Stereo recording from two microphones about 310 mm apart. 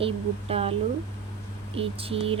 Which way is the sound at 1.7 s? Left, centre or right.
Centre.